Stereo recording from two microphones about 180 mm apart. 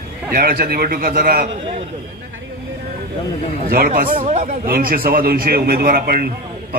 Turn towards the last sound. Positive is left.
turn(degrees=-55)  # may be behind; listen again after turning